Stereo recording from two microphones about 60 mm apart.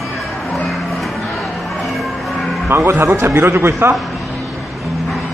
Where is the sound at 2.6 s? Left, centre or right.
Right.